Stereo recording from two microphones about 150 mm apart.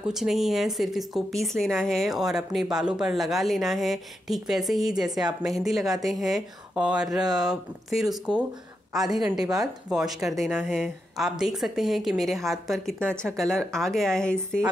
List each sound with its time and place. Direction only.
0.0 s speech: centre (ahead or behind)